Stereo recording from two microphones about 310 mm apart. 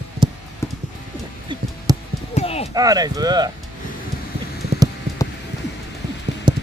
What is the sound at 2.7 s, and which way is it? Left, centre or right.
Speech, centre.